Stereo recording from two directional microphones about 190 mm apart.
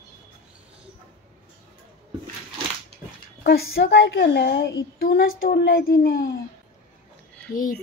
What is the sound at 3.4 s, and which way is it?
A woman's voice, 60° left (ahead or behind).